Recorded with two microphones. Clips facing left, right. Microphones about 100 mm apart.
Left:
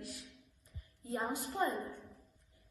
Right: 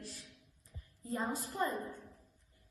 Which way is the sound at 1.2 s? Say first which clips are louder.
Right 1 dB; 20° left (ahead or behind).